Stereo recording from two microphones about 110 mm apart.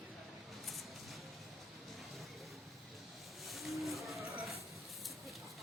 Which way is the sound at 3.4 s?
Centre (ahead or behind).